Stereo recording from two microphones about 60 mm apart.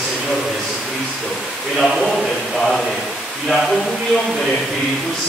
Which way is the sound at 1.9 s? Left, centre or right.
Centre.